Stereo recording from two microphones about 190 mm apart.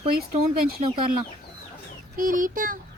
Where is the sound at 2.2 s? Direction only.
45° right (ahead or behind).